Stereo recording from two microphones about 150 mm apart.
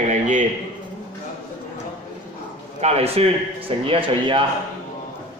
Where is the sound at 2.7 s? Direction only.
45° right (ahead or behind).